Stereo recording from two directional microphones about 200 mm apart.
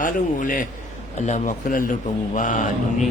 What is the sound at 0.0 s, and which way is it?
Speech, 40° left (ahead or behind).